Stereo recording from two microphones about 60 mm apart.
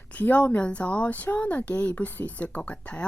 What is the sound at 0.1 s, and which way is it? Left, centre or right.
Speech, left.